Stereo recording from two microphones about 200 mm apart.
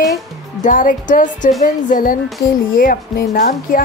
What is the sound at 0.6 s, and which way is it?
Speech, 40° left (ahead or behind).